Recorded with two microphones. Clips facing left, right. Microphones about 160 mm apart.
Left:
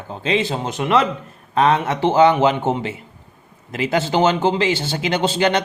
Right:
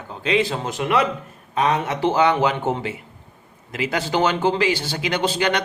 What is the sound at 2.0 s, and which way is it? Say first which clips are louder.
A man's voice: left 4 dB; 25° left (ahead or behind).